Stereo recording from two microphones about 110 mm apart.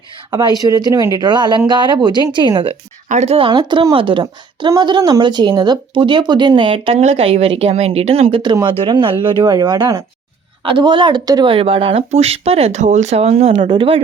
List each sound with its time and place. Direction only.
0.3 s speech: 40° right (ahead or behind)
3.1 s speech: 90° right
3.3 s speech: 55° right (ahead or behind)
3.6 s speech: 45° right (ahead or behind); by 8.4 s 60° right (ahead or behind)
8.6 s speech: 45° right (ahead or behind)
10.6 s speech: 50° right (ahead or behind)
11.5 s speech: 55° right (ahead or behind)
13.6 s speech: 50° right (ahead or behind)